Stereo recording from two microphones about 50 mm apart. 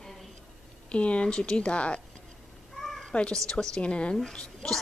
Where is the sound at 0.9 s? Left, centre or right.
Left.